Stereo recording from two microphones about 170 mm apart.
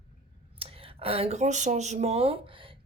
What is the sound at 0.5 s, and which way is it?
Speech, 35° right (ahead or behind).